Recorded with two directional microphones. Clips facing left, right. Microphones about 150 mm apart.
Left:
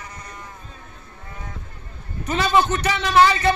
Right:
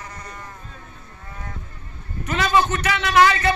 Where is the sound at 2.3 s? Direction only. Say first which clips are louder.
Left 1 dB; 30° left (ahead or behind).